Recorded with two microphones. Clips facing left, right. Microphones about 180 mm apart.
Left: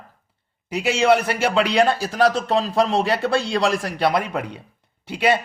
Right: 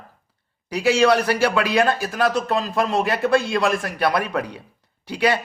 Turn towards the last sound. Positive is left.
turn(degrees=25)  # may be behind; listen again after turning